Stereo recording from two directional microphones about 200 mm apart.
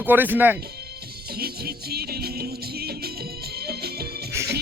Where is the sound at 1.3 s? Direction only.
50° right (ahead or behind).